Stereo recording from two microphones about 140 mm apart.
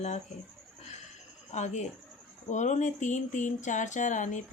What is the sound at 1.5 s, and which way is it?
Speech, 55° left (ahead or behind).